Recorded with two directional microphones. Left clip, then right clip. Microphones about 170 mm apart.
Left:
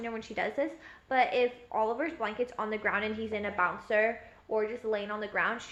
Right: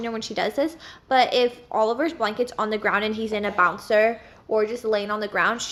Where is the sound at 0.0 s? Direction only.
30° right (ahead or behind).